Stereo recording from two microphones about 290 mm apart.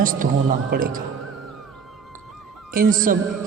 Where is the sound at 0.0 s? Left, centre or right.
Right.